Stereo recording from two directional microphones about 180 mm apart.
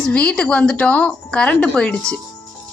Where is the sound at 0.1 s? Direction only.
5° left (ahead or behind).